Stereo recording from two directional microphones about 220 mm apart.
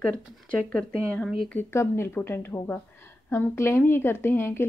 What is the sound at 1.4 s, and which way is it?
A woman's voice, 5° left (ahead or behind).